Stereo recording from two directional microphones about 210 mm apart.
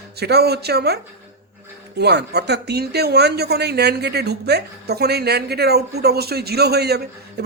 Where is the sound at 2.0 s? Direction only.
55° right (ahead or behind).